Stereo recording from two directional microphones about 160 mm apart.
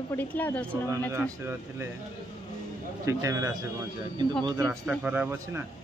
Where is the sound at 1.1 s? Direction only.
15° right (ahead or behind).